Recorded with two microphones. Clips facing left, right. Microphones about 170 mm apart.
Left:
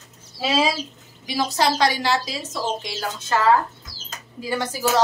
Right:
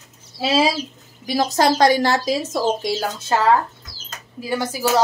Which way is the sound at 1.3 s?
45° right (ahead or behind).